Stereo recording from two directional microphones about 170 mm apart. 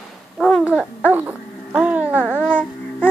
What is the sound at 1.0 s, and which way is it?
Babbling, 10° right (ahead or behind).